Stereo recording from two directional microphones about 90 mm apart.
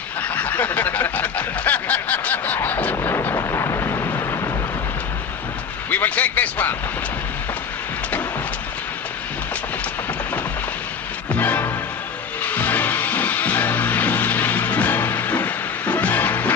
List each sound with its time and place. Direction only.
0.2 s snicker: 20° left (ahead or behind)
2.9 s vehicle: 30° left (ahead or behind)
5.9 s a sound: 20° left (ahead or behind)
11.3 s music: 20° left (ahead or behind)